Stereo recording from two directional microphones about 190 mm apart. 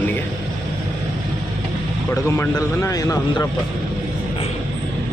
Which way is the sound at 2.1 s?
15° left (ahead or behind).